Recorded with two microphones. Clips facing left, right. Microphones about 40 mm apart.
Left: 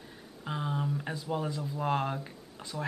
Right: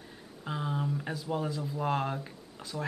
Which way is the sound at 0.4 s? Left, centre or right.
Centre.